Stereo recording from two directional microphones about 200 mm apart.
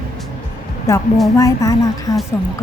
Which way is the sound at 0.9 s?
15° left (ahead or behind).